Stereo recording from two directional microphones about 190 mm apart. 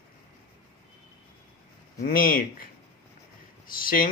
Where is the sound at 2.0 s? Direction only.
50° left (ahead or behind).